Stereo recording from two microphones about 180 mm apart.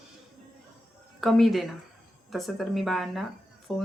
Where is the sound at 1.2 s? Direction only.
Centre (ahead or behind).